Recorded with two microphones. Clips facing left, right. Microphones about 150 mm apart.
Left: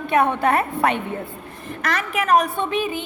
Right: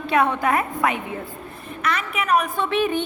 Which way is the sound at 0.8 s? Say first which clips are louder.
Left 2 dB; 65° left (ahead or behind).